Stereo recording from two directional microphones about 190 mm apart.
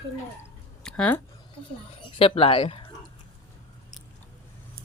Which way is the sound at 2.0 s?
30° left (ahead or behind).